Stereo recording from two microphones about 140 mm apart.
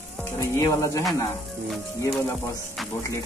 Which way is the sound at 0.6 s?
25° left (ahead or behind).